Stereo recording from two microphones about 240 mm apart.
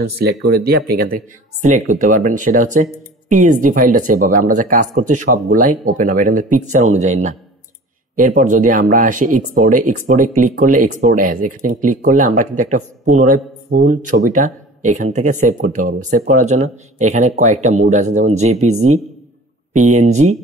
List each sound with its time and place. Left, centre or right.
0.0 s speech: right
8.2 s speech: right
19.7 s speech: right